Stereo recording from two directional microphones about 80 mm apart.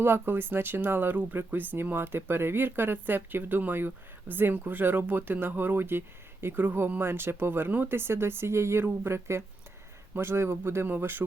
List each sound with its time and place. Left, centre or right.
0.0 s speech: right